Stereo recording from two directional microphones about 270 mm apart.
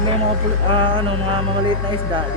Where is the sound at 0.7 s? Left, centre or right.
Centre.